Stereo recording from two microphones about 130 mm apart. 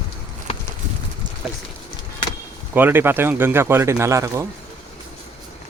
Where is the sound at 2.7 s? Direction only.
15° right (ahead or behind).